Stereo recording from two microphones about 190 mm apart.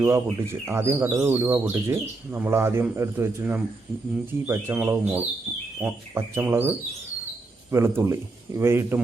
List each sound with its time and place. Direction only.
0.0 s speech: 15° right (ahead or behind)